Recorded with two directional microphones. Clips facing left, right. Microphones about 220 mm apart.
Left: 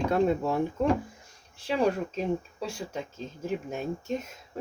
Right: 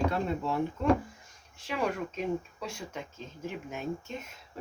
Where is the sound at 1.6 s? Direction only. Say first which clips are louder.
Left 6 dB; 35° left (ahead or behind).